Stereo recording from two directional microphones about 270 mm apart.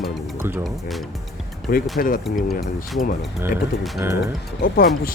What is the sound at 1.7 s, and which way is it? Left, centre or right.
Speech, left.